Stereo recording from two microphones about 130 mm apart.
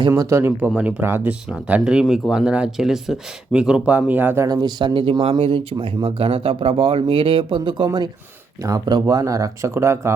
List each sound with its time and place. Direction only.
0.1 s speech: 20° right (ahead or behind)
4.4 s speech: 30° right (ahead or behind)